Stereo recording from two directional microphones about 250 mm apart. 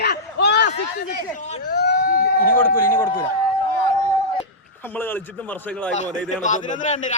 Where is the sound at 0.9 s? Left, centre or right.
Left.